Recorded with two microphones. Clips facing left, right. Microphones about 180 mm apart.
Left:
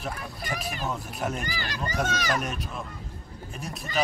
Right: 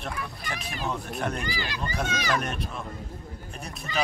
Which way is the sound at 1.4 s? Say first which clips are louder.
Right 1 dB; 45° left (ahead or behind).